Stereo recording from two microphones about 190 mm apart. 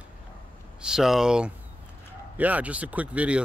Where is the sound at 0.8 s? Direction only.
5° right (ahead or behind).